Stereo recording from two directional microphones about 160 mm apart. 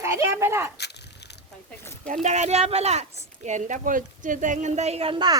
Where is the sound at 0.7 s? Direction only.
90° left.